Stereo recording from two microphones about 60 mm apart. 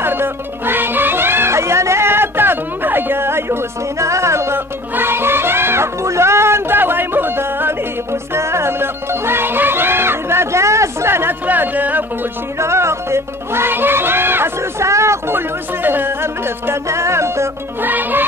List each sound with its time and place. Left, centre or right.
0.0 s music: right
4.9 s music: right
11.4 s music: right
12.5 s music: right
15.3 s music: right
17.8 s music: right